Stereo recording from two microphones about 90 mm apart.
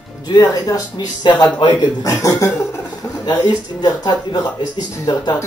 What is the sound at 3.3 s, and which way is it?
Speech, 50° left (ahead or behind).